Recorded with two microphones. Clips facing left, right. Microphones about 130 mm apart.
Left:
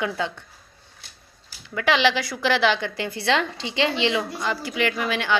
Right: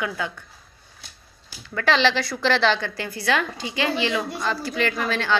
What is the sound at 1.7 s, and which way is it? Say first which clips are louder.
A woman's voice: even; 15° left (ahead or behind).